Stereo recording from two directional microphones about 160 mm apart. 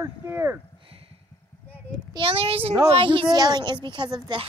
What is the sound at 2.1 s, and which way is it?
Speech, 35° right (ahead or behind).